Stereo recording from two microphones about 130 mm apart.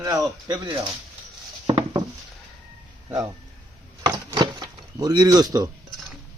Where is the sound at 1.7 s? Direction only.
40° right (ahead or behind).